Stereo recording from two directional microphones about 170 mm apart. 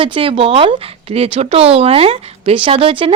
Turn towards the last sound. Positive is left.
turn(degrees=-30)  # may be behind; listen again after turning